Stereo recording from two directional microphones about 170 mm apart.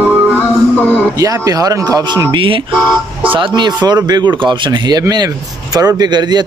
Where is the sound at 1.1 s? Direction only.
20° right (ahead or behind).